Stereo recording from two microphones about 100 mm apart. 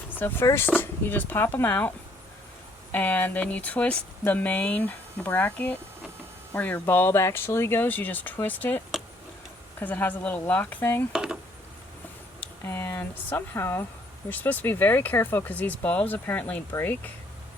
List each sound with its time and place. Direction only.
0.1 s speech: 20° left (ahead or behind)
2.9 s speech: 15° left (ahead or behind)
9.8 s speech: 15° left (ahead or behind)
11.1 s speech: 5° right (ahead or behind)
12.6 s speech: 25° left (ahead or behind)